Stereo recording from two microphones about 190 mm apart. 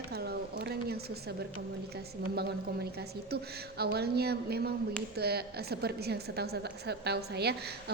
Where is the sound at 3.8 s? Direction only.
55° right (ahead or behind).